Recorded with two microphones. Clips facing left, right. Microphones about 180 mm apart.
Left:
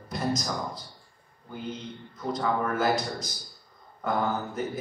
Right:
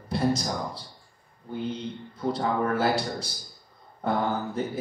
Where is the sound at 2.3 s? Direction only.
30° right (ahead or behind).